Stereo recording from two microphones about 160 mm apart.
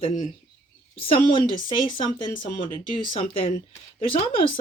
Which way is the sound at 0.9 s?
35° left (ahead or behind).